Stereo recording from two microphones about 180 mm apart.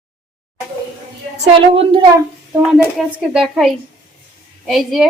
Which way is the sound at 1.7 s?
30° right (ahead or behind).